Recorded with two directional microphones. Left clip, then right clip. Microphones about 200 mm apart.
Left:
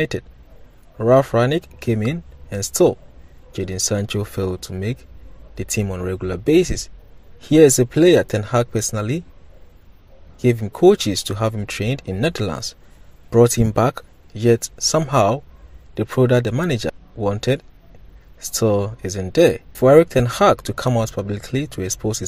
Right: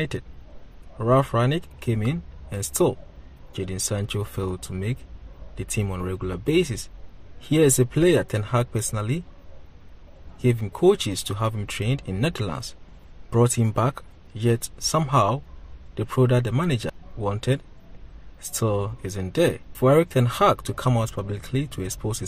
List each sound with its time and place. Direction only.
0.9 s speech: 20° left (ahead or behind)
10.4 s speech: 20° left (ahead or behind)